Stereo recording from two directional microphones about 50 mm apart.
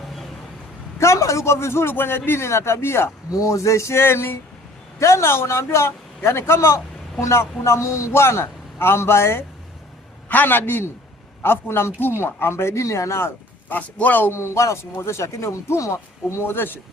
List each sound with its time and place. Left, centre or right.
0.9 s a man's voice: left
2.5 s a man's voice: left
3.4 s speech: left
4.9 s a man's voice: left
10.2 s a man's voice: left
13.7 s a man's voice: left
14.3 s speech: left
16.4 s a man's voice: left